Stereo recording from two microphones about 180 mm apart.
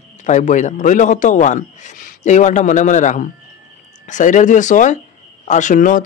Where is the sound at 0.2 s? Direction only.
45° left (ahead or behind).